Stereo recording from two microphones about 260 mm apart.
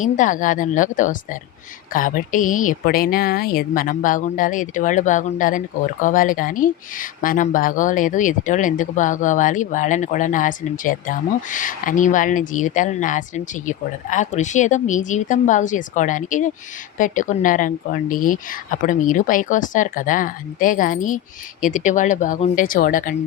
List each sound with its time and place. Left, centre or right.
0.0 s speech: left